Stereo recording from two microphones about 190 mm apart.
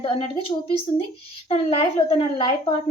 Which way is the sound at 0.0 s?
30° left (ahead or behind).